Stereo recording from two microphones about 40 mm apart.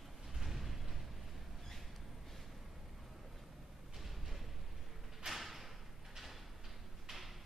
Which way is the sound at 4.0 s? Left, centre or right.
Centre.